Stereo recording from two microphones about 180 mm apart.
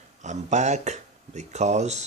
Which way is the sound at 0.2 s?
40° right (ahead or behind).